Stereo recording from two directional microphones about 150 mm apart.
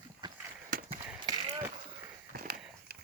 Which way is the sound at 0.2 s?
30° right (ahead or behind).